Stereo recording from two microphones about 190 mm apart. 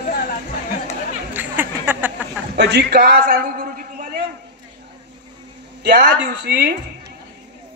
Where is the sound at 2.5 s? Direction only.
60° right (ahead or behind).